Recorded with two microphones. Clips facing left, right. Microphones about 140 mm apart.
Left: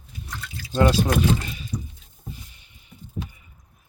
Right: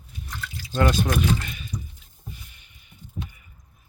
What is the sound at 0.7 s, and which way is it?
Speech, 30° left (ahead or behind).